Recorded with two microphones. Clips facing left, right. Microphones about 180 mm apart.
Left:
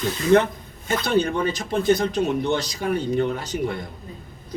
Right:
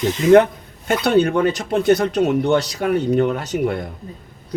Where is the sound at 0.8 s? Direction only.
80° right.